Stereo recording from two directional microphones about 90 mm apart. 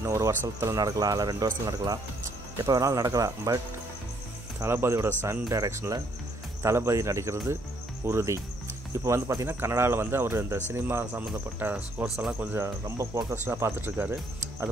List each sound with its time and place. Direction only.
0.0 s speech: 30° right (ahead or behind)
4.6 s speech: 30° right (ahead or behind)
12.6 s speech: 35° right (ahead or behind)